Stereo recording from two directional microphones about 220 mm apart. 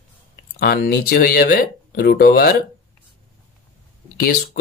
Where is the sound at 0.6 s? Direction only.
45° left (ahead or behind).